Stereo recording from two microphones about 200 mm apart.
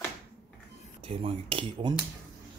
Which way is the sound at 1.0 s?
30° right (ahead or behind).